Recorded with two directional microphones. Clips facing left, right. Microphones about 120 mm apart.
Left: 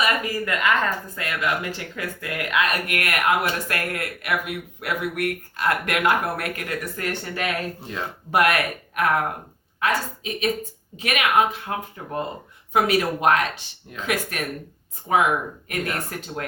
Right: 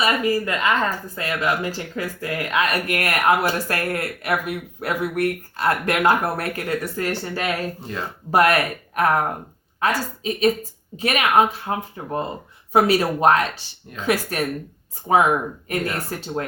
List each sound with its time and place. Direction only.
0.0 s speech: 30° right (ahead or behind)
7.8 s speech: centre (ahead or behind)
8.3 s speech: 35° right (ahead or behind)